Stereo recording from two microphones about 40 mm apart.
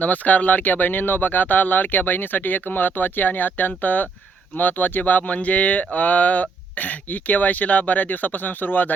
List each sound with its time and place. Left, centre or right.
0.0 s speech: left